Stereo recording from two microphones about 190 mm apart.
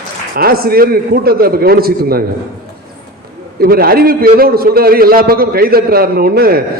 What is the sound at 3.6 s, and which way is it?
A man's voice, 50° right (ahead or behind).